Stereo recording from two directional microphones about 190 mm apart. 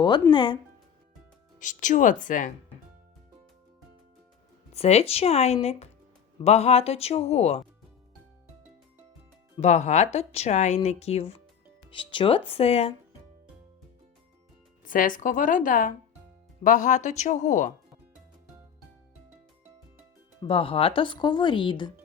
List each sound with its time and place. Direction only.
0.0 s speech: 25° left (ahead or behind)
1.5 s speech: 40° left (ahead or behind)
4.7 s speech: 35° left (ahead or behind)
9.6 s speech: 35° left (ahead or behind)
14.8 s a woman's voice: 45° left (ahead or behind)
20.4 s speech: 30° left (ahead or behind)